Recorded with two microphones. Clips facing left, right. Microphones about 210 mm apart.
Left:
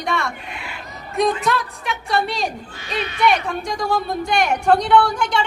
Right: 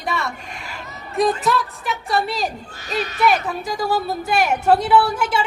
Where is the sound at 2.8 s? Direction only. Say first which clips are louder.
Right 2 dB; 45° right (ahead or behind).